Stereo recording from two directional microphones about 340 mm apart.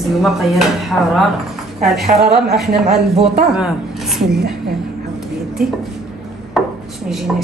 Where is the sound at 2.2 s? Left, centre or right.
Right.